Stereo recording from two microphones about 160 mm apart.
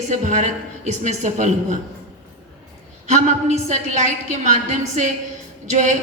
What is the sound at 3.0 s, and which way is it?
A woman's voice, 45° right (ahead or behind).